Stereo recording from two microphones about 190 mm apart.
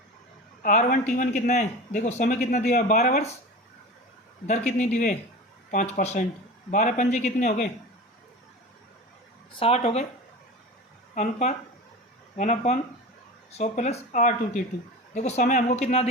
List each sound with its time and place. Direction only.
0.6 s a man's voice: 40° left (ahead or behind)
4.4 s a man's voice: 40° left (ahead or behind)
9.6 s a man's voice: 30° left (ahead or behind)
11.1 s a man's voice: 35° left (ahead or behind)